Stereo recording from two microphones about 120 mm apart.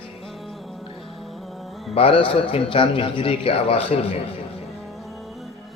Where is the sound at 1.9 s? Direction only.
50° left (ahead or behind).